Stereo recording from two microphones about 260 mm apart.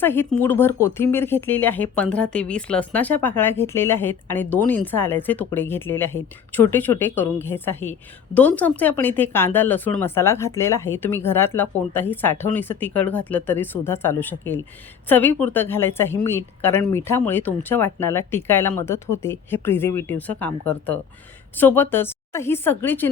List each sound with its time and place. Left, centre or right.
0.0 s a woman's voice: centre